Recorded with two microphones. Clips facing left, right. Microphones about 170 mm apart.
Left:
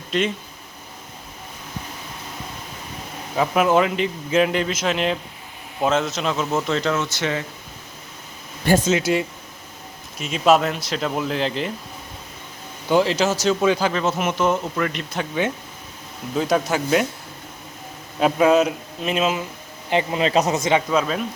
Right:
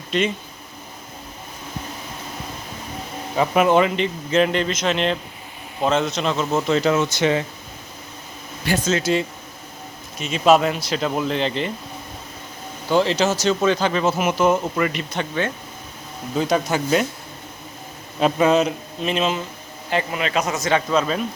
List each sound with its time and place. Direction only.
0.1 s speech: centre (ahead or behind)
3.3 s speech: centre (ahead or behind); by 7.4 s 20° right (ahead or behind)
8.9 s speech: 15° left (ahead or behind)
10.2 s speech: centre (ahead or behind)
12.9 s speech: 5° left (ahead or behind)
16.3 s speech: centre (ahead or behind)
18.2 s speech: 5° left (ahead or behind)
19.9 s speech: 20° left (ahead or behind)
20.7 s speech: 15° left (ahead or behind)
21.0 s speech: centre (ahead or behind)